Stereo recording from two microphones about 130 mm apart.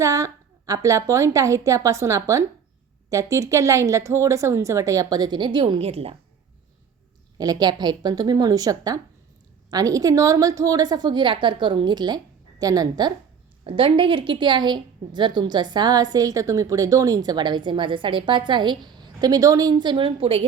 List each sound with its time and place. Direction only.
0.0 s a woman's voice: 25° right (ahead or behind); by 6.1 s 50° right (ahead or behind)
7.3 s a woman's voice: 30° right (ahead or behind)
13.7 s a woman's voice: 45° right (ahead or behind)